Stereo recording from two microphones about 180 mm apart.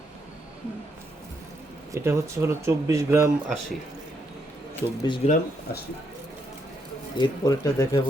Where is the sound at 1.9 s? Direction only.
15° right (ahead or behind).